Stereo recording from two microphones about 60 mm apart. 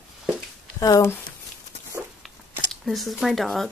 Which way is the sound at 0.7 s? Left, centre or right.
Left.